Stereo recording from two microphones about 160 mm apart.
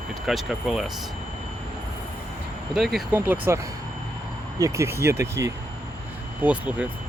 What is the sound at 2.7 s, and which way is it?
Speech, centre (ahead or behind).